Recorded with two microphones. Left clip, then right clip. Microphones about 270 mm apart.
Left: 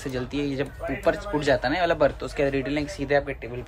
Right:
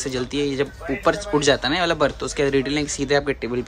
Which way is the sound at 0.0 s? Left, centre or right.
Centre.